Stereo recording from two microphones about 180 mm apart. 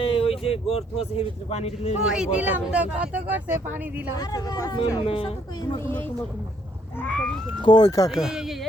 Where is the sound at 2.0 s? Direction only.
5° right (ahead or behind).